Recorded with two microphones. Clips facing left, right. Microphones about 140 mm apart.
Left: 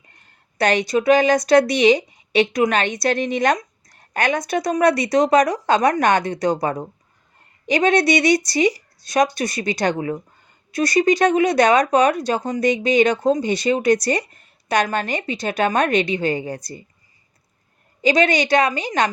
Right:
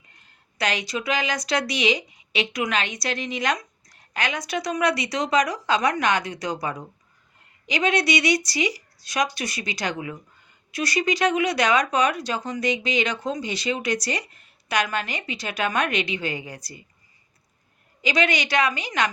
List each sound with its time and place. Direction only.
0.6 s speech: 50° left (ahead or behind)
18.0 s speech: 45° left (ahead or behind)